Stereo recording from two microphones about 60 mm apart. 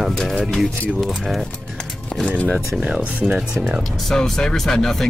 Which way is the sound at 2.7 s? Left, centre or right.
Centre.